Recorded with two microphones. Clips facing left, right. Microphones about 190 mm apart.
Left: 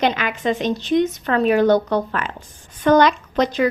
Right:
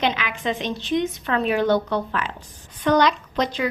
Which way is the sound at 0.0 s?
45° left (ahead or behind).